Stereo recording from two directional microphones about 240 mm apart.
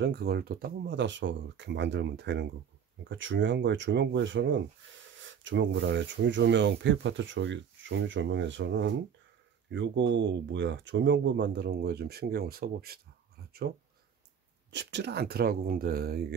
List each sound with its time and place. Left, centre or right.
0.0 s speech: right